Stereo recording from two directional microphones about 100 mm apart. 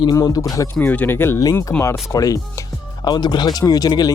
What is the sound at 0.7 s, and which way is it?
Speech, 15° left (ahead or behind).